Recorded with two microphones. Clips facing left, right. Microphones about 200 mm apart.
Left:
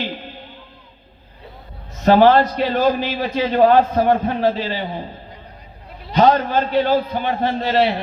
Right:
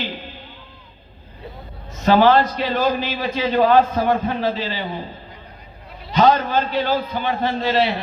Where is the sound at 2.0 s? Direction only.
55° left (ahead or behind).